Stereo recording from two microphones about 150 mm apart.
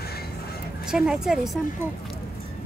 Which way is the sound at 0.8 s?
5° right (ahead or behind).